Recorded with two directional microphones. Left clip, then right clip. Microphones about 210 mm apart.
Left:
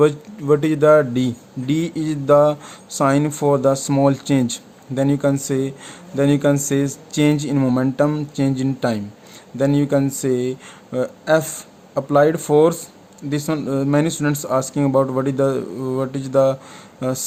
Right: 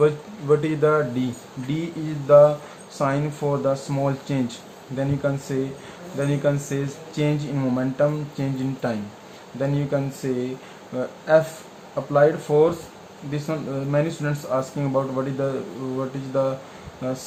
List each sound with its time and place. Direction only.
0.0 s speech: 55° left (ahead or behind)